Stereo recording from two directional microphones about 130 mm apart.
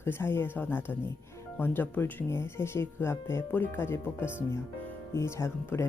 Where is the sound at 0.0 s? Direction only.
15° left (ahead or behind).